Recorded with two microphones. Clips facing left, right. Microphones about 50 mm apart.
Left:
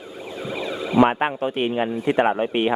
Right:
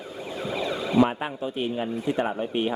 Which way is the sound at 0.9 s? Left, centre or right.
Left.